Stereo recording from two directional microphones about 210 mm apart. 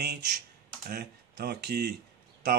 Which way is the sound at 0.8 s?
45° right (ahead or behind).